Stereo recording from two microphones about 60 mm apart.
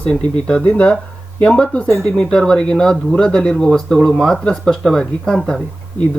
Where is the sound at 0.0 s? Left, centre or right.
Centre.